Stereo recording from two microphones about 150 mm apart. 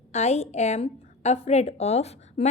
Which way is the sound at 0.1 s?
45° left (ahead or behind).